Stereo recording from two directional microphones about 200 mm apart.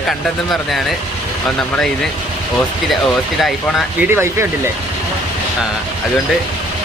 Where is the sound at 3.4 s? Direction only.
Centre (ahead or behind).